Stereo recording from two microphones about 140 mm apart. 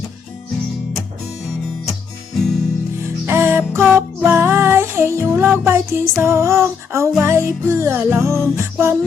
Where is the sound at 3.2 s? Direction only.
20° right (ahead or behind).